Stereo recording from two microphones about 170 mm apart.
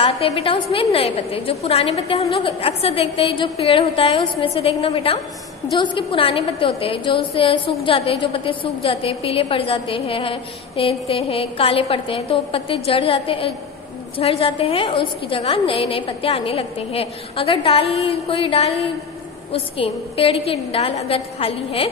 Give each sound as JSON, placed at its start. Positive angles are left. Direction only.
{"t": 0.0, "sound": "a woman's voice", "side_deg": 35}